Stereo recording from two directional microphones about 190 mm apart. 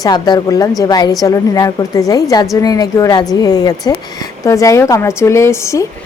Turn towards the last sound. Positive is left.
turn(degrees=15)  # may be behind; listen again after turning